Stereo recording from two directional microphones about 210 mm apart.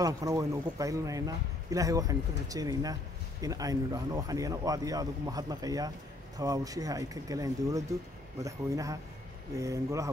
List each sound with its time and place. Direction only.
0.0 s a man's voice: 15° right (ahead or behind)